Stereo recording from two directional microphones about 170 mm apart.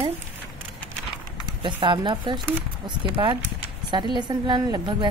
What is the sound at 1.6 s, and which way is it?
Speech, 30° right (ahead or behind).